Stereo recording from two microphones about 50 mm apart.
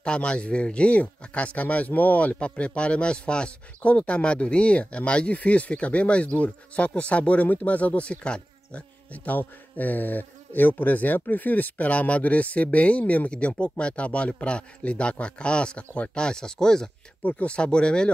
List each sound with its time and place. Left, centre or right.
0.0 s speech: centre
17.2 s speech: left